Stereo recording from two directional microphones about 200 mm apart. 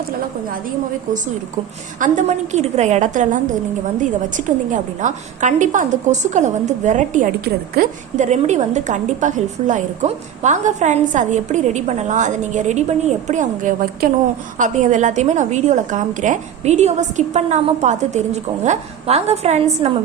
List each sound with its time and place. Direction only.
2.0 s a woman's voice: 35° right (ahead or behind)